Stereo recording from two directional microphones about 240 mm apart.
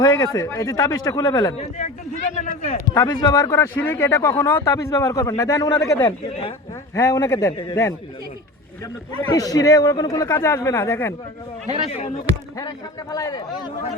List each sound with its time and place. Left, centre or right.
0.0 s speech: centre
2.3 s speech: left
2.9 s speech: centre
9.3 s speech: centre
11.7 s speech: left
12.5 s speech: centre